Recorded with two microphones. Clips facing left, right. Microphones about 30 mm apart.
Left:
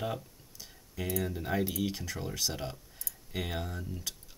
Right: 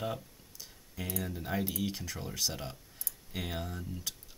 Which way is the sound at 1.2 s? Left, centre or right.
Centre.